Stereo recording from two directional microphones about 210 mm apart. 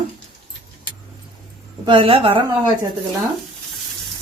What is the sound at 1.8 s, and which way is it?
Speech, 25° right (ahead or behind).